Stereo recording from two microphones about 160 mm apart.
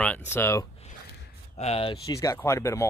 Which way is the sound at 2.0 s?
20° left (ahead or behind).